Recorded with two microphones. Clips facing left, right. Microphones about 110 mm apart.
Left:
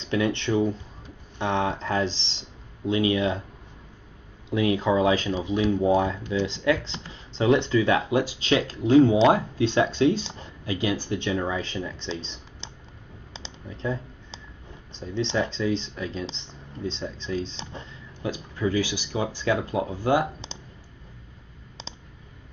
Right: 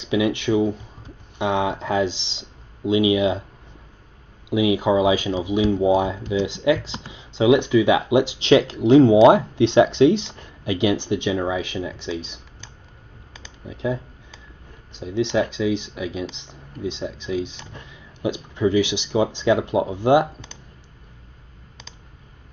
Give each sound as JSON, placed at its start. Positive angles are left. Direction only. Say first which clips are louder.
{"t": 0.0, "sound": "speech", "louder": "right 4 dB", "side_deg": -10}
{"t": 4.5, "sound": "speech", "louder": "right 4 dB", "side_deg": -10}
{"t": 10.2, "sound": "speech", "louder": "left 1 dB", "side_deg": 25}
{"t": 10.6, "sound": "speech", "louder": "right 6 dB", "side_deg": -20}
{"t": 13.7, "sound": "speech", "louder": "right 5 dB", "side_deg": -10}